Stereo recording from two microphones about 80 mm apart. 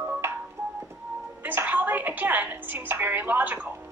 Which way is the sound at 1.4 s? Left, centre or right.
Right.